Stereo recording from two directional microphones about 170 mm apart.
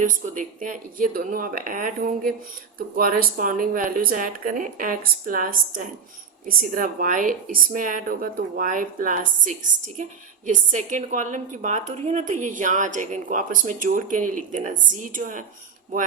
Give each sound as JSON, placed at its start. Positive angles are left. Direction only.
{"t": 0.0, "sound": "a woman's voice", "side_deg": -50}